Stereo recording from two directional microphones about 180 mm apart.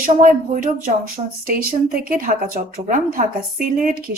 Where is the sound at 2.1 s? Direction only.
50° right (ahead or behind).